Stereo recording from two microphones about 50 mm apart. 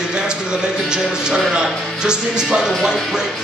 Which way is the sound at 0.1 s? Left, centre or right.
Centre.